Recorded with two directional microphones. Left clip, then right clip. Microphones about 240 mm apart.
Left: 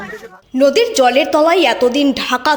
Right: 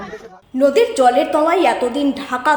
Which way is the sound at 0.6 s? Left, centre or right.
Left.